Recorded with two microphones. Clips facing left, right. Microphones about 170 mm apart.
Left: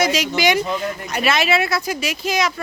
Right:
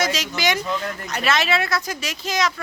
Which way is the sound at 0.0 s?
10° left (ahead or behind).